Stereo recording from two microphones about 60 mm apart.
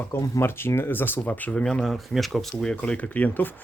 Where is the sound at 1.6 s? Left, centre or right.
Centre.